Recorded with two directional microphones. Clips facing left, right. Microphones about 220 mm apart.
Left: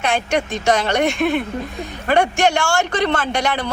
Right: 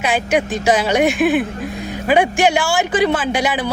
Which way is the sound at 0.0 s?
5° right (ahead or behind).